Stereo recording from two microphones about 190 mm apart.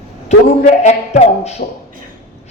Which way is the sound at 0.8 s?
35° left (ahead or behind).